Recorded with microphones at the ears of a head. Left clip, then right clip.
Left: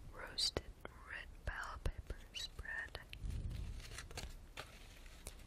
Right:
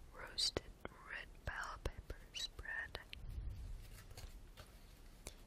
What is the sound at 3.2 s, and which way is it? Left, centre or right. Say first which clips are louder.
Walk: left 6 dB; left.